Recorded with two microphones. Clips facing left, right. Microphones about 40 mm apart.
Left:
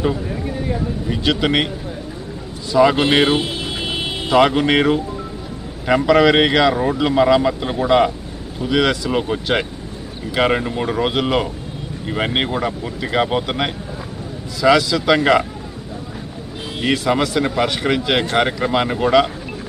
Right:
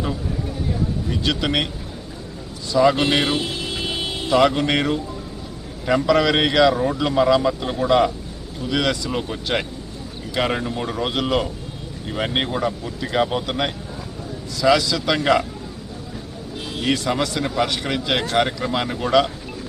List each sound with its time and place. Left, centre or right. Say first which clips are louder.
1.1 s speech: left 5 dB; centre
2.7 s speech: left 3 dB; centre
16.8 s speech: left 4 dB; centre